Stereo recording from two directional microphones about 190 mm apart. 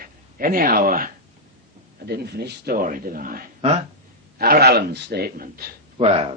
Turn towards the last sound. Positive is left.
turn(degrees=-30)  # may be behind; listen again after turning